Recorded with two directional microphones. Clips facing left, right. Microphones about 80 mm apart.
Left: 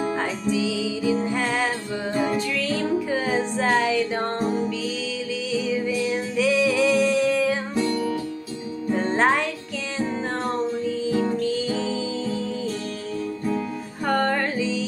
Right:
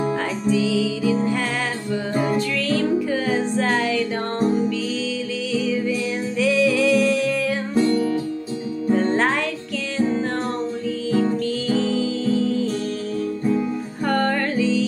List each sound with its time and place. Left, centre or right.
0.2 s music: centre
5.7 s music: centre
8.9 s music: centre
11.1 s music: centre
14.0 s music: centre